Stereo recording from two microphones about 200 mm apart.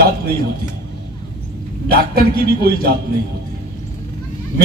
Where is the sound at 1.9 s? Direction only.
50° right (ahead or behind).